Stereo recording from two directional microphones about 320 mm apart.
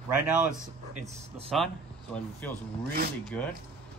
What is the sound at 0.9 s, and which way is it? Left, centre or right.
Speech, right.